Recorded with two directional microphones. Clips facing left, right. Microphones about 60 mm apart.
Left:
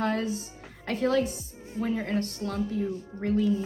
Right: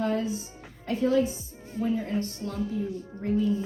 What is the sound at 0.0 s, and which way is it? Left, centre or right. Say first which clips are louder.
A woman's voice: even; left.